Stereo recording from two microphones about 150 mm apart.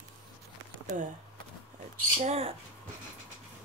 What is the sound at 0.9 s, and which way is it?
Speech, 60° right (ahead or behind).